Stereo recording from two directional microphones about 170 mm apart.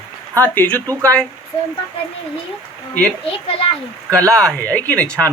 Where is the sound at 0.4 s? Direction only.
10° left (ahead or behind).